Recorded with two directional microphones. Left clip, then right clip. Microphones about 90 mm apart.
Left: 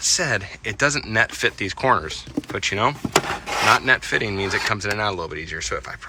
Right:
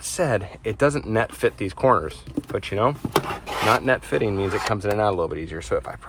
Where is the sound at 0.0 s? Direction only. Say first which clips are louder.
Left 2 dB; 25° right (ahead or behind).